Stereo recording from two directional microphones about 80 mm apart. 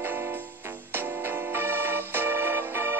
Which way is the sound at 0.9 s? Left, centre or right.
Right.